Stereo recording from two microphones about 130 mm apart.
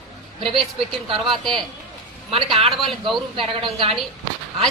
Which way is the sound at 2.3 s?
45° right (ahead or behind).